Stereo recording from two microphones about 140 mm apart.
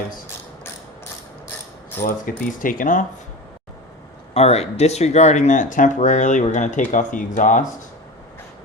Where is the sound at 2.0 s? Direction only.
90° left; by 3.1 s 70° left (ahead or behind).